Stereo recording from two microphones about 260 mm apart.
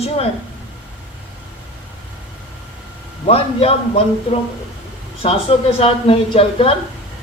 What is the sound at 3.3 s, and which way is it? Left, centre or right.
Speech, left.